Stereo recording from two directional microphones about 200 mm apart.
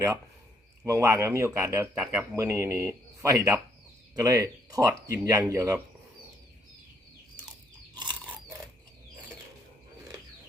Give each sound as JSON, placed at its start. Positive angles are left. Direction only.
{"t": 0.9, "sound": "speech", "side_deg": -15}